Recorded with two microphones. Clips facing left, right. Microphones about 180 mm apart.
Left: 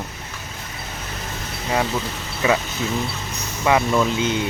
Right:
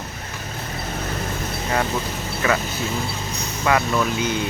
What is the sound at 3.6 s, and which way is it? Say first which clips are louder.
Speech: left 2 dB; 20° left (ahead or behind).